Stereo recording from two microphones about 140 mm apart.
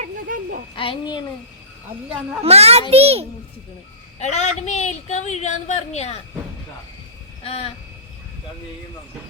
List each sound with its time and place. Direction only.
0.0 s a sound: 75° right (ahead or behind)
0.8 s a child's voice: 35° left (ahead or behind)
2.4 s a child's voice: 50° right (ahead or behind)
4.2 s a woman's voice: 55° left (ahead or behind)
7.4 s vehicle: 45° left (ahead or behind)